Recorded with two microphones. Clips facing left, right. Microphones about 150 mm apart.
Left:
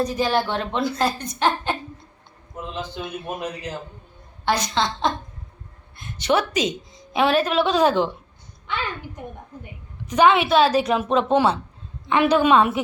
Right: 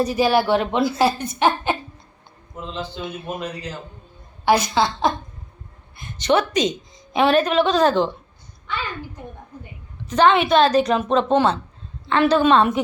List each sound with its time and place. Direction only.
0.0 s a woman's voice: 10° right (ahead or behind)
2.6 s a man's voice: 15° left (ahead or behind)
4.4 s a woman's voice: 10° right (ahead or behind)
6.1 s a woman's voice: 5° left (ahead or behind)
10.1 s speech: 10° left (ahead or behind)